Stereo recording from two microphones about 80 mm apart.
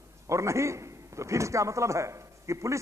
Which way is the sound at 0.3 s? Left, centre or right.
Right.